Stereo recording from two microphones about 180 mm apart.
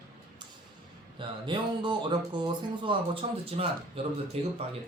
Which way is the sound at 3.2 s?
40° right (ahead or behind).